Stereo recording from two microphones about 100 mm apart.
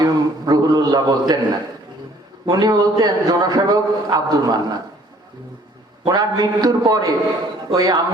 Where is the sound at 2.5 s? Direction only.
45° right (ahead or behind).